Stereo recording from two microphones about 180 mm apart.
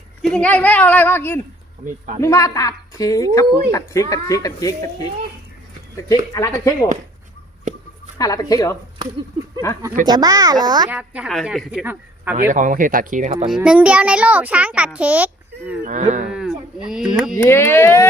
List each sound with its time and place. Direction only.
0.2 s a woman's voice: 5° left (ahead or behind); by 4.7 s 20° left (ahead or behind)
6.0 s a woman's voice: 20° left (ahead or behind)
8.2 s a woman's voice: 20° left (ahead or behind)
10.1 s speech: 20° right (ahead or behind)
10.8 s a woman's voice: 5° right (ahead or behind)
12.4 s speech: 45° right (ahead or behind)
13.5 s a child's voice: 5° right (ahead or behind)
15.8 s speech: 45° right (ahead or behind)
16.3 s a sound: 5° right (ahead or behind)
17.3 s a woman's voice: 15° left (ahead or behind)